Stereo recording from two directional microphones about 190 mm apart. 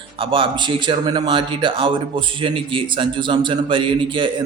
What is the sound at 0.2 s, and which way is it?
A man's voice, 25° right (ahead or behind).